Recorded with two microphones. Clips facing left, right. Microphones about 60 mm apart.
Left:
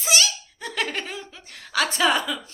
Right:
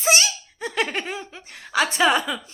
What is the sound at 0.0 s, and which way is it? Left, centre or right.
Giggle, right.